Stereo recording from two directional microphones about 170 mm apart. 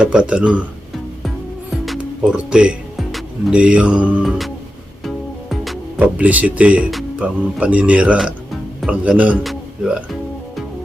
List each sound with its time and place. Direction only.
0.0 s speech: 5° right (ahead or behind)
1.7 s speech: centre (ahead or behind)
5.0 s music: centre (ahead or behind)
6.0 s speech: 10° right (ahead or behind)
8.8 s music: 5° right (ahead or behind)